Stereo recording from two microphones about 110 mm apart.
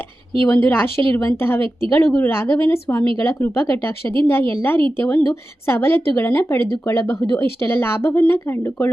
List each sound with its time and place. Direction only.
0.4 s a woman's voice: 15° left (ahead or behind)